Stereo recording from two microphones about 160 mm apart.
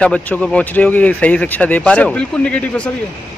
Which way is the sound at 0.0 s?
5° left (ahead or behind).